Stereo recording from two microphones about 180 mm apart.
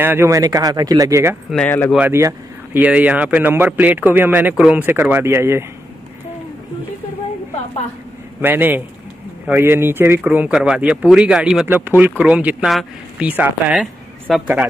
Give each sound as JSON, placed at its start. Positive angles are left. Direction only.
{"t": 0.0, "sound": "speech", "side_deg": -15}
{"t": 1.5, "sound": "speech", "side_deg": 10}
{"t": 2.0, "sound": "speech", "side_deg": -15}
{"t": 8.4, "sound": "speech", "side_deg": -10}